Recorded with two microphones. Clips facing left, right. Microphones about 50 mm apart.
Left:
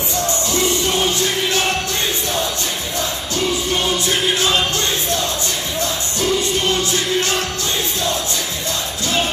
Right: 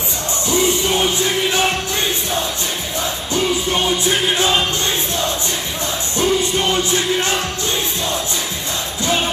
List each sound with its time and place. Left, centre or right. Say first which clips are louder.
0.5 s music: right 6 dB; right
3.3 s music: right 2 dB; right
6.1 s music: right 3 dB; right